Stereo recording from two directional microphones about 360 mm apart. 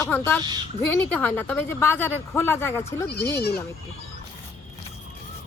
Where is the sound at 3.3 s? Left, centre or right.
Left.